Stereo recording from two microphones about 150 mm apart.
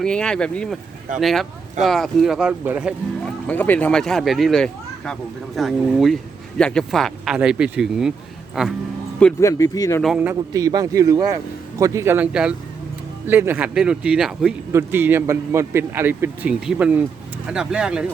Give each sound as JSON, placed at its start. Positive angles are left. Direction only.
{"t": 0.0, "sound": "speech", "side_deg": 5}
{"t": 3.2, "sound": "speech", "side_deg": 10}
{"t": 9.4, "sound": "speech", "side_deg": 20}
{"t": 10.5, "sound": "a man's voice", "side_deg": -25}
{"t": 14.7, "sound": "a man's voice", "side_deg": -15}